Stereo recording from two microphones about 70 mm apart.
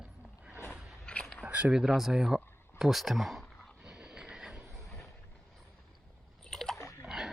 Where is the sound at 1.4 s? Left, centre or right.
Right.